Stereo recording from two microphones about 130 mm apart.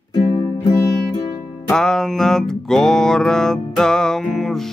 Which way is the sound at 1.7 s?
5° left (ahead or behind).